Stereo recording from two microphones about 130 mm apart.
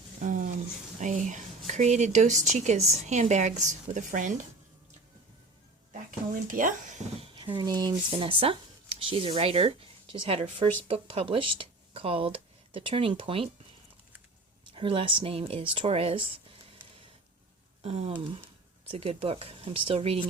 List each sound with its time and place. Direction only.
0.2 s a sound: 75° right (ahead or behind)
0.9 s speech: 65° right (ahead or behind)
5.9 s a sound: 90° right
7.2 s speech: 40° right (ahead or behind)
14.7 s speech: 40° right (ahead or behind)
17.8 s speech: 55° right (ahead or behind)